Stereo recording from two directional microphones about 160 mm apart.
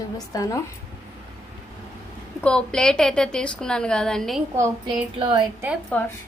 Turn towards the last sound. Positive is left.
turn(degrees=10)  # may be behind; listen again after turning